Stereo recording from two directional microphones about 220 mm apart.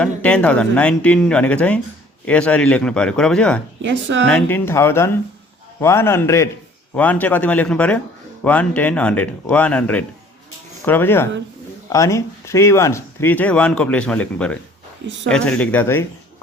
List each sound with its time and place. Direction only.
0.0 s speech: 5° left (ahead or behind)
3.8 s speech: 55° right (ahead or behind)
4.3 s speech: 5° left (ahead or behind)